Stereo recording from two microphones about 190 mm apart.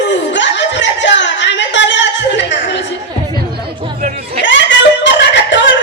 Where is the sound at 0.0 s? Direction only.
70° left (ahead or behind).